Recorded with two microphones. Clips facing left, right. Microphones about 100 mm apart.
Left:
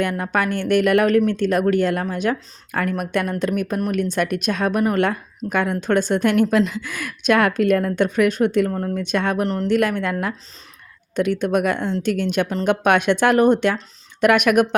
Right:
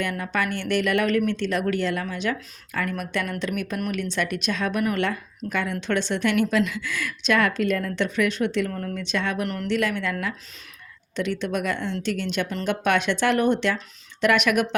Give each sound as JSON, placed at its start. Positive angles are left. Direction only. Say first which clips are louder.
{"t": 0.0, "sound": "speech", "louder": "left 5 dB", "side_deg": 50}